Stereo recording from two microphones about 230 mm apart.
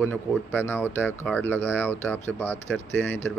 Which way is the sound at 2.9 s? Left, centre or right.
Left.